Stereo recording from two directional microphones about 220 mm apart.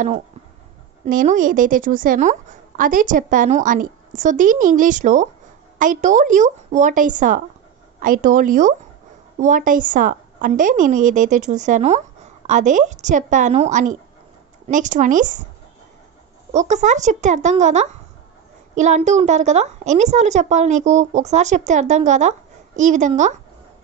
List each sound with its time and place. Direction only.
1.0 s a woman's voice: 35° right (ahead or behind)
16.5 s a woman's voice: 35° right (ahead or behind)